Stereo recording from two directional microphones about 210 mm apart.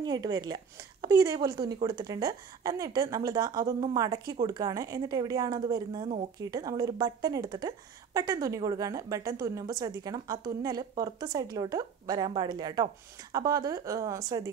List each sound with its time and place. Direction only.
0.0 s a woman's voice: 20° right (ahead or behind)